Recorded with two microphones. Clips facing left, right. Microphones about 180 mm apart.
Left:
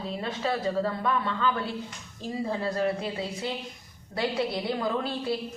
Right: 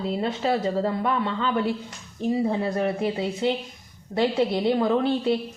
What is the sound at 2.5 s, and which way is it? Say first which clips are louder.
A woman's voice: right 3 dB; 20° right (ahead or behind).